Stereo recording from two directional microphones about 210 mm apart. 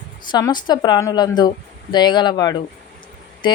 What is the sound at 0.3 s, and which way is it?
A woman's voice, 20° left (ahead or behind).